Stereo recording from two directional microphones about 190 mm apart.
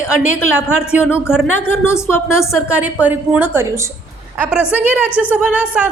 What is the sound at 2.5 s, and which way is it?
A woman's voice, 5° right (ahead or behind).